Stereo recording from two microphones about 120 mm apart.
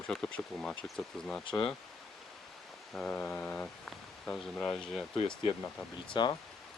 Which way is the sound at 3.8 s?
5° left (ahead or behind).